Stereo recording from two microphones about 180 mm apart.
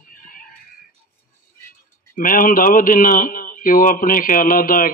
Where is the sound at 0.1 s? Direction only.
50° left (ahead or behind).